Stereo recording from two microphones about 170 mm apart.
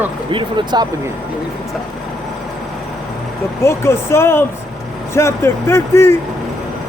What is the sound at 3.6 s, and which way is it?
Speech, 15° left (ahead or behind).